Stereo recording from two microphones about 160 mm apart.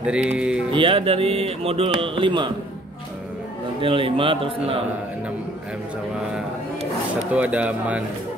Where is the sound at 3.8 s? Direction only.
35° right (ahead or behind).